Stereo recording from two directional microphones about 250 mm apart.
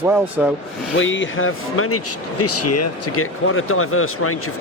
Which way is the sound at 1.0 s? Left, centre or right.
Left.